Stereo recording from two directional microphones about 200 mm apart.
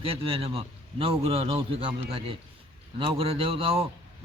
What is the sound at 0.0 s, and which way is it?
A man's voice, 25° right (ahead or behind).